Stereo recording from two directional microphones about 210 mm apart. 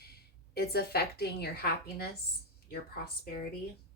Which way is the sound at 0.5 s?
50° left (ahead or behind).